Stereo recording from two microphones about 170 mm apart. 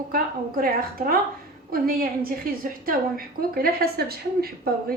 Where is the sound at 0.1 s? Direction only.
60° right (ahead or behind).